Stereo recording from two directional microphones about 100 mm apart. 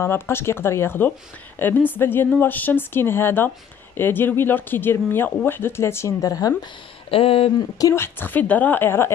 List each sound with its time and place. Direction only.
0.0 s speech: 25° left (ahead or behind)
6.2 s a woman's voice: 35° left (ahead or behind)
7.1 s speech: 70° left (ahead or behind)
7.9 s speech: 20° left (ahead or behind)